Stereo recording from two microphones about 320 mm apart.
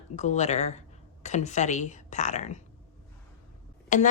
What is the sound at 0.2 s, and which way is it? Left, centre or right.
A woman's voice, left.